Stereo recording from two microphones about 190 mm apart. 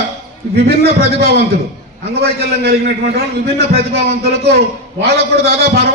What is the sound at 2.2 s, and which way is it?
Speech, 55° right (ahead or behind).